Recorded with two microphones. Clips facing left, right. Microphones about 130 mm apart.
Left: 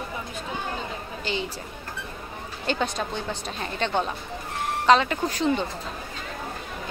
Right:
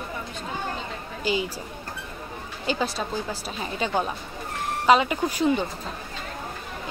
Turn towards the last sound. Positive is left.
turn(degrees=-10)  # may be behind; listen again after turning